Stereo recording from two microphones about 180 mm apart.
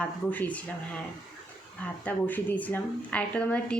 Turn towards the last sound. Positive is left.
turn(degrees=5)  # may be behind; listen again after turning